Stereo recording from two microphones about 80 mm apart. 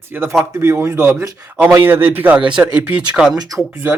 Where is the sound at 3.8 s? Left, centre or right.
Right.